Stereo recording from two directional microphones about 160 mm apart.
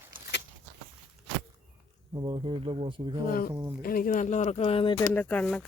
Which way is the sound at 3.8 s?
60° left (ahead or behind).